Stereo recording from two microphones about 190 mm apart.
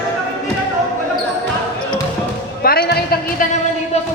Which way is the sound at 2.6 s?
55° left (ahead or behind).